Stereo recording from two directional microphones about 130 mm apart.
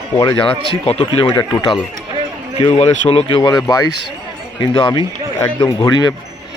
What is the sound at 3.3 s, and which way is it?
Speech, 35° left (ahead or behind).